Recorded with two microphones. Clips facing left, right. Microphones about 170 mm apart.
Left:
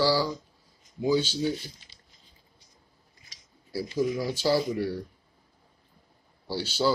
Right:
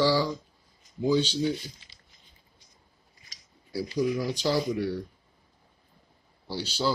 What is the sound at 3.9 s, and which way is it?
Speech, 10° left (ahead or behind).